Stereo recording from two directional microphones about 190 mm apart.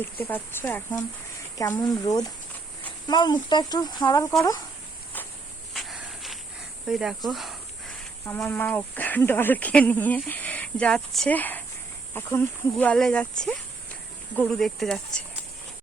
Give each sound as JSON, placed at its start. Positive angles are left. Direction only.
{"t": 0.0, "sound": "speech", "side_deg": 10}
{"t": 5.7, "sound": "snake", "side_deg": 0}
{"t": 8.3, "sound": "speech", "side_deg": 10}